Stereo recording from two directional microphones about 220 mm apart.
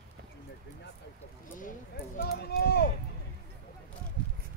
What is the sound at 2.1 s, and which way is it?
Speech, 45° left (ahead or behind).